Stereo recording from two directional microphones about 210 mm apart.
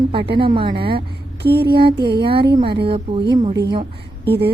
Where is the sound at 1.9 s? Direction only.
50° right (ahead or behind).